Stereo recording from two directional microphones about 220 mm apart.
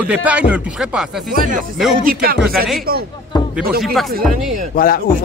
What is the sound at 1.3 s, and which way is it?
Speech, 40° right (ahead or behind).